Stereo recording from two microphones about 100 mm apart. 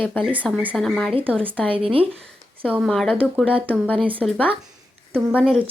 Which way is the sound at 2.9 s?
5° left (ahead or behind).